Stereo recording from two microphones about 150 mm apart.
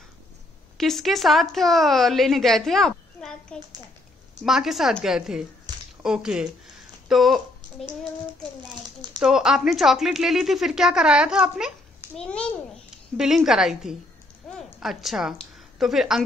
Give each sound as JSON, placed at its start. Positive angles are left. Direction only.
{"t": 0.7, "sound": "speech", "side_deg": 0}
{"t": 5.7, "sound": "a sound", "side_deg": -30}
{"t": 6.0, "sound": "speech", "side_deg": -5}
{"t": 8.3, "sound": "a child's voice", "side_deg": -30}
{"t": 9.2, "sound": "speech", "side_deg": -5}
{"t": 12.2, "sound": "a child's voice", "side_deg": 5}
{"t": 12.9, "sound": "a sound", "side_deg": -5}
{"t": 13.5, "sound": "a woman's voice", "side_deg": -5}